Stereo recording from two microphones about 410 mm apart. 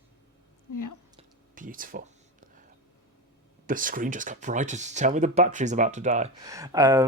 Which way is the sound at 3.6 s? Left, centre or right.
Centre.